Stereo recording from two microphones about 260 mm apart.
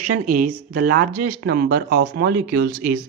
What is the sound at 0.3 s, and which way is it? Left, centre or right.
Speech, right.